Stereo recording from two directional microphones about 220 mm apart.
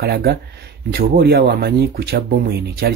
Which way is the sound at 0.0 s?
45° right (ahead or behind).